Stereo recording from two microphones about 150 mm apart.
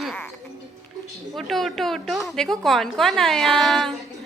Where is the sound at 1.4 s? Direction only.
Centre (ahead or behind).